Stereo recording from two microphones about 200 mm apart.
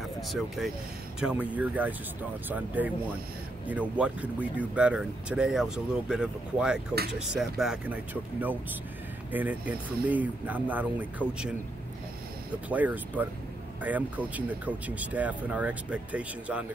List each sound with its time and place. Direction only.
1.2 s speech: 5° right (ahead or behind)
12.6 s speech: 10° right (ahead or behind)